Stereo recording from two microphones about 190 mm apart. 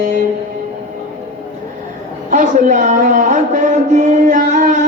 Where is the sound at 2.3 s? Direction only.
40° right (ahead or behind).